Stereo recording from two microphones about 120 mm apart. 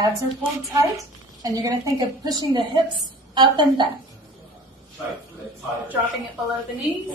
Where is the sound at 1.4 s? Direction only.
30° right (ahead or behind).